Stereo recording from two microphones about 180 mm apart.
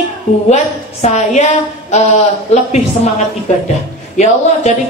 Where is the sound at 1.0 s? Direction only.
40° left (ahead or behind).